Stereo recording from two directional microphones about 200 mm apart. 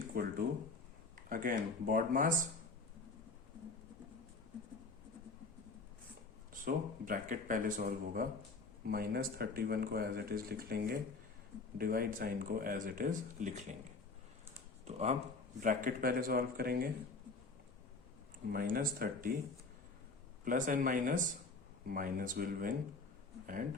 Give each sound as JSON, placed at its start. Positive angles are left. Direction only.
{"t": 0.1, "sound": "speech", "side_deg": -45}
{"t": 6.5, "sound": "speech", "side_deg": -45}
{"t": 14.8, "sound": "speech", "side_deg": -35}
{"t": 18.4, "sound": "speech", "side_deg": -45}
{"t": 20.4, "sound": "speech", "side_deg": -40}